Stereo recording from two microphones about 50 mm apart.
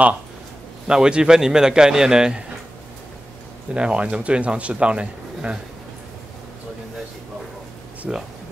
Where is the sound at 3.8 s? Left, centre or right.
Right.